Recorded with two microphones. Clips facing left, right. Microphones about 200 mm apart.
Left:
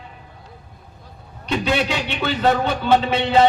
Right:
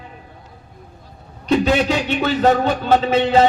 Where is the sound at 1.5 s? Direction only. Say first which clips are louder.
Right 5 dB; 40° right (ahead or behind).